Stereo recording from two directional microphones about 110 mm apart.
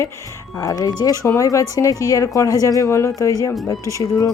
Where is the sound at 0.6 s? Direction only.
30° left (ahead or behind).